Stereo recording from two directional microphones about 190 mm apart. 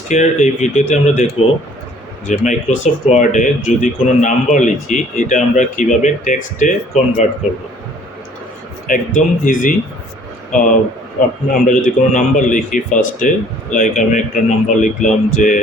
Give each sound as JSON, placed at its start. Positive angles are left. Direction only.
{"t": 0.1, "sound": "speech", "side_deg": 40}
{"t": 2.2, "sound": "speech", "side_deg": 40}
{"t": 8.9, "sound": "speech", "side_deg": 45}